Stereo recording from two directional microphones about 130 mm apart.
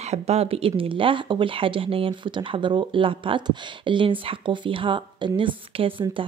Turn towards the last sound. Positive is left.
turn(degrees=-40)  # may be behind; listen again after turning